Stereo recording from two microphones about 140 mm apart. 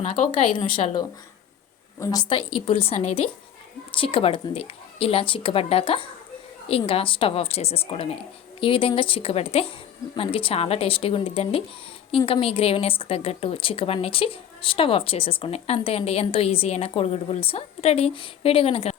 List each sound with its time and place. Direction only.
0.3 s a woman's voice: 40° left (ahead or behind)
3.9 s a woman's voice: 40° left (ahead or behind)